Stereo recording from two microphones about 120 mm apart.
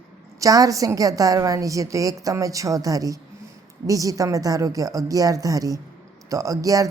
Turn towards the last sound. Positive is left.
turn(degrees=-30)  # may be behind; listen again after turning